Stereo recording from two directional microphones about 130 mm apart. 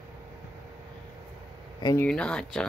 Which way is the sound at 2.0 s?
5° left (ahead or behind).